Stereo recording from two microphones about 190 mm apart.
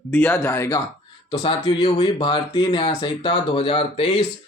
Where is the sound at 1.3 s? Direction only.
25° left (ahead or behind).